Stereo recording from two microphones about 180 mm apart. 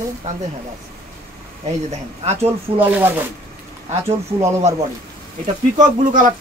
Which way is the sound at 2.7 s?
10° right (ahead or behind).